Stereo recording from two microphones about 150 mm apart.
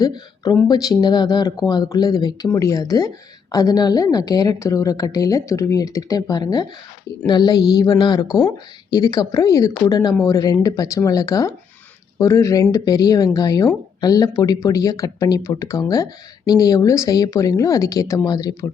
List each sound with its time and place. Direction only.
0.0 s speech: 25° left (ahead or behind)